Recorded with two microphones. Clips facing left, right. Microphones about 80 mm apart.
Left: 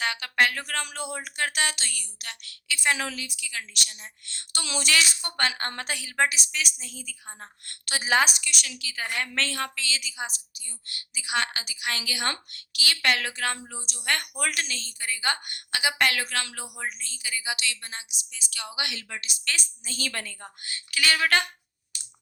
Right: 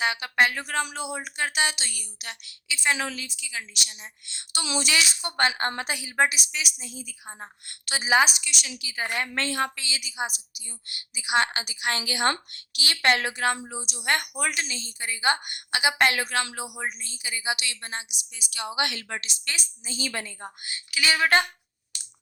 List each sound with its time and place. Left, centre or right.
0.0 s a woman's voice: centre
5.4 s a woman's voice: right
7.6 s a woman's voice: centre
8.6 s a woman's voice: centre
13.7 s speech: centre
14.0 s speech: centre
14.3 s a woman's voice: centre
16.6 s speech: centre
17.0 s a woman's voice: right
18.8 s a woman's voice: right
19.5 s speech: centre